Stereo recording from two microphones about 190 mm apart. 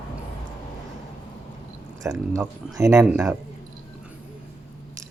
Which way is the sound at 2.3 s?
15° right (ahead or behind).